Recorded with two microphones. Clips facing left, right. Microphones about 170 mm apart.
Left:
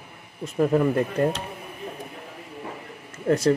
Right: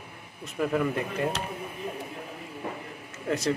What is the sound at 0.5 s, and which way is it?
Speech, 35° left (ahead or behind).